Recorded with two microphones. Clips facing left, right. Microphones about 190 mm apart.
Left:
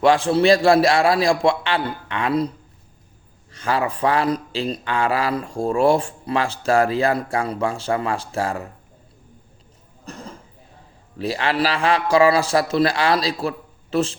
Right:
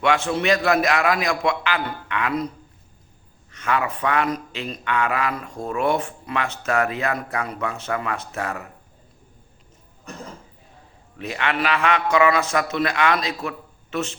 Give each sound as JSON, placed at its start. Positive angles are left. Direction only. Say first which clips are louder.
{"t": 0.0, "sound": "speech", "louder": "left 5 dB", "side_deg": 35}
{"t": 3.5, "sound": "speech", "louder": "left 2 dB", "side_deg": 30}
{"t": 11.2, "sound": "speech", "louder": "left 4 dB", "side_deg": 30}